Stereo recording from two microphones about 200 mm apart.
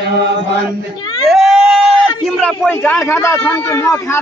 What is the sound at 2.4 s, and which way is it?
A man's voice, 5° left (ahead or behind).